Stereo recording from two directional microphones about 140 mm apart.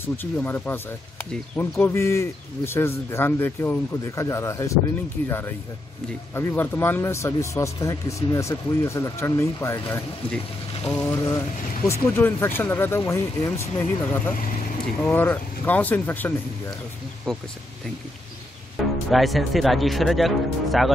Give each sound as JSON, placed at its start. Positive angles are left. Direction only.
{"t": 0.0, "sound": "speech", "side_deg": 15}
{"t": 6.3, "sound": "speech", "side_deg": 15}
{"t": 11.1, "sound": "speech", "side_deg": 25}
{"t": 19.0, "sound": "speech", "side_deg": 0}